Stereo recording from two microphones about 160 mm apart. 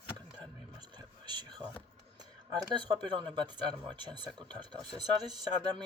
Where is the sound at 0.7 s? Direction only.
30° right (ahead or behind).